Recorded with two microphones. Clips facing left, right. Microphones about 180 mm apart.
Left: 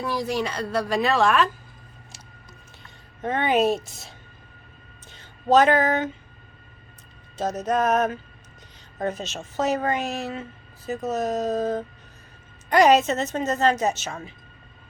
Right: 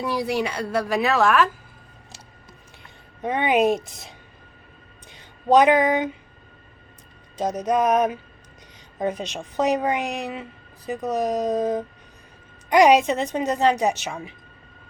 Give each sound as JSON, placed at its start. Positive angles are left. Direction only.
{"t": 0.0, "sound": "a woman's voice", "side_deg": -10}
{"t": 3.2, "sound": "a woman's voice", "side_deg": -15}
{"t": 5.1, "sound": "speech", "side_deg": -15}
{"t": 7.3, "sound": "a woman's voice", "side_deg": -10}